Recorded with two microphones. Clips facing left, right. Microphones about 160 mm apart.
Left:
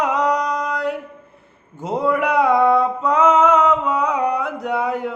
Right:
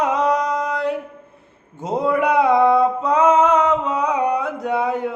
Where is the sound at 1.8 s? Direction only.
20° right (ahead or behind).